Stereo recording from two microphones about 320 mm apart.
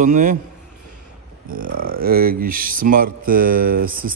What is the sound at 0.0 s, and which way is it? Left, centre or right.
Music, right.